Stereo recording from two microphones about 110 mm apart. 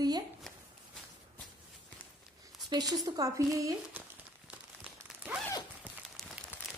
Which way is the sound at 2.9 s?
30° right (ahead or behind).